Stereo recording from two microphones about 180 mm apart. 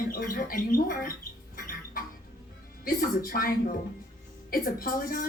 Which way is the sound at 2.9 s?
50° left (ahead or behind).